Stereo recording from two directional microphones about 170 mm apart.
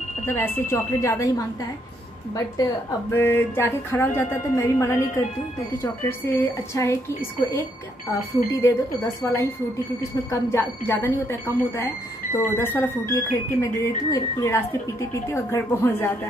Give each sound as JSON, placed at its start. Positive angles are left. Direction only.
{"t": 0.3, "sound": "speech", "side_deg": 15}
{"t": 3.1, "sound": "speech", "side_deg": 15}
{"t": 9.2, "sound": "speech", "side_deg": 15}